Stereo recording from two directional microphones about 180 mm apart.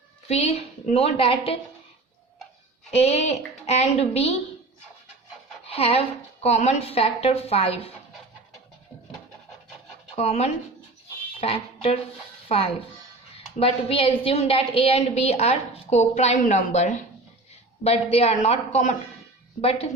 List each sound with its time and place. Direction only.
0.3 s a woman's voice: 35° left (ahead or behind)
2.9 s a woman's voice: 35° left (ahead or behind)
5.6 s a woman's voice: 35° left (ahead or behind)
10.2 s a woman's voice: 35° left (ahead or behind)
11.3 s music: 35° left (ahead or behind)
12.5 s a woman's voice: 30° left (ahead or behind)